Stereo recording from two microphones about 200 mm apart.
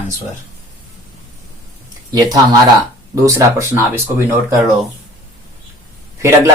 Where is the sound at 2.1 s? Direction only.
20° right (ahead or behind).